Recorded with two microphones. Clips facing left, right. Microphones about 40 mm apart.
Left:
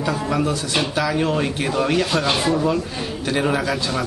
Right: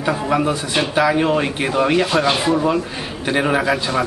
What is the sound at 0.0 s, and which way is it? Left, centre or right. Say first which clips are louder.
A man's voice: right 3 dB; right.